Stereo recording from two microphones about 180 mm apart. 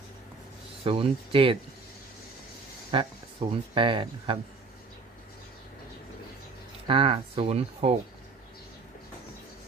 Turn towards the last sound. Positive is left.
turn(degrees=-35)  # may be behind; listen again after turning